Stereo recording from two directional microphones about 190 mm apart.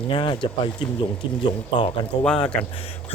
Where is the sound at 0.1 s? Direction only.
25° left (ahead or behind).